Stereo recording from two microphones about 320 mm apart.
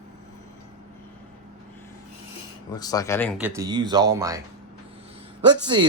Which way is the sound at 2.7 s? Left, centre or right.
Centre.